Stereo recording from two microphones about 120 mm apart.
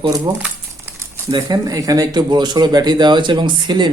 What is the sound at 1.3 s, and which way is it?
Speech, 35° right (ahead or behind).